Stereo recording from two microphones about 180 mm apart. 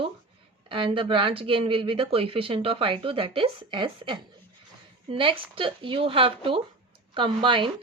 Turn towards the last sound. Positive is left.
turn(degrees=-25)  # may be behind; listen again after turning